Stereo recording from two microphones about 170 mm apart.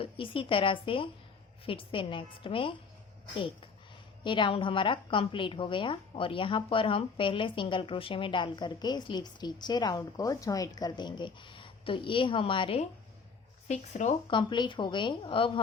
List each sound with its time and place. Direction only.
0.0 s a woman's voice: 30° left (ahead or behind)
4.2 s a woman's voice: 30° left (ahead or behind)
14.3 s a woman's voice: 30° left (ahead or behind)